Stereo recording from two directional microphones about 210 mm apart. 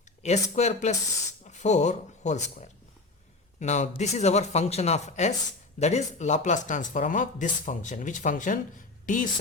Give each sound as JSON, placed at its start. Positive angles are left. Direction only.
{"t": 0.2, "sound": "a woman's voice", "side_deg": 30}